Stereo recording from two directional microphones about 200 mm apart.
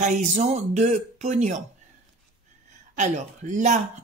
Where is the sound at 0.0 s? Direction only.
35° right (ahead or behind).